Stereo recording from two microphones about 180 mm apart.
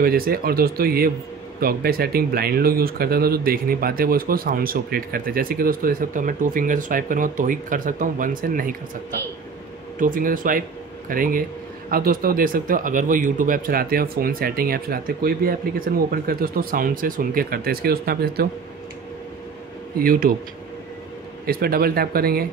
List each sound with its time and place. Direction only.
0.0 s speech: 55° right (ahead or behind)
9.9 s speech: 50° right (ahead or behind)
20.0 s speech: 50° right (ahead or behind)
21.5 s speech: 55° right (ahead or behind)